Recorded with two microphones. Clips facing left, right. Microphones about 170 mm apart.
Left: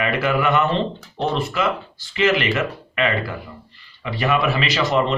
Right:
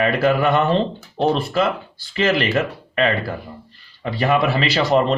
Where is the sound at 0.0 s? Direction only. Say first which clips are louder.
Right 3 dB; 35° right (ahead or behind).